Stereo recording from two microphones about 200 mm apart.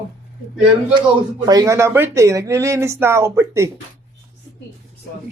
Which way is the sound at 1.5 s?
15° right (ahead or behind).